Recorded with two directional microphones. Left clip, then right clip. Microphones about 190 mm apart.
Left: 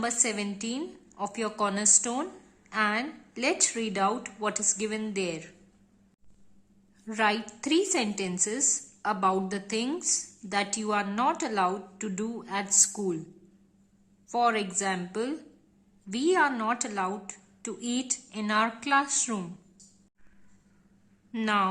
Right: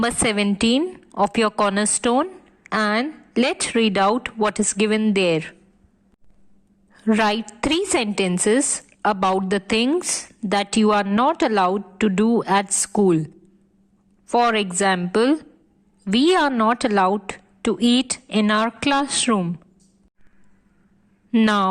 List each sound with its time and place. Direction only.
0.0 s speech: 45° right (ahead or behind)
6.9 s a woman's voice: 45° right (ahead or behind)
14.3 s a woman's voice: 40° right (ahead or behind)
21.4 s speech: 45° right (ahead or behind)